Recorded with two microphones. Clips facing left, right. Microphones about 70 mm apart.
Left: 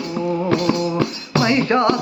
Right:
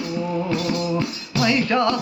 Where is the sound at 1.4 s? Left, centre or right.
Left.